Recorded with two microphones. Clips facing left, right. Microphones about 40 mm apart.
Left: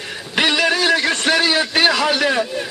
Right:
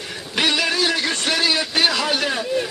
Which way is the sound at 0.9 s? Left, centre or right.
Left.